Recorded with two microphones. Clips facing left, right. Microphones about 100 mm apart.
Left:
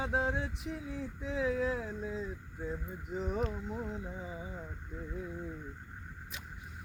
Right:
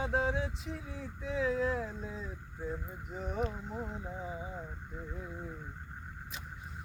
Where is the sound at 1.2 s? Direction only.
65° right (ahead or behind).